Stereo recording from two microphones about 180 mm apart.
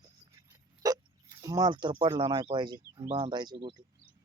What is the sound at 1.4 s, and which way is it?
Speech, 20° right (ahead or behind).